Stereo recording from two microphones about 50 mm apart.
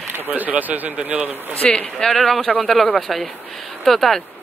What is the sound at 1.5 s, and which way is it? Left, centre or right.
Speech, left.